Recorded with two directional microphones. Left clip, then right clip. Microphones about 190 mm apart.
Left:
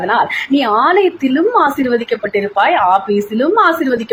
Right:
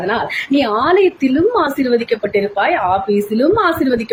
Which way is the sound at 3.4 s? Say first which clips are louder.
Left 3 dB; 25° right (ahead or behind).